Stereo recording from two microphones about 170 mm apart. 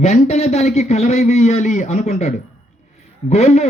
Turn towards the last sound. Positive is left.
turn(degrees=40)  # may be behind; listen again after turning